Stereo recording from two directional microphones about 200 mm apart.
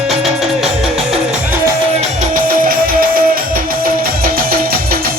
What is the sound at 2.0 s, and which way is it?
Music, 40° right (ahead or behind).